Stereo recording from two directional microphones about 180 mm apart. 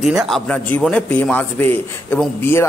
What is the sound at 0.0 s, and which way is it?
Speech, centre (ahead or behind).